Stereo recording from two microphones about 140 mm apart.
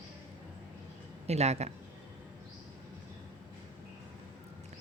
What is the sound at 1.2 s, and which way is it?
Speech, 50° right (ahead or behind).